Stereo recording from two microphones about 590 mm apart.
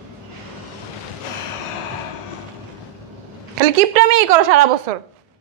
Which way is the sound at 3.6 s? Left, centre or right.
Right.